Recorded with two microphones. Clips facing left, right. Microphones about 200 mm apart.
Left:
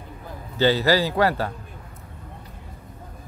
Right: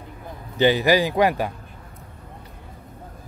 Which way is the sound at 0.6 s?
15° right (ahead or behind).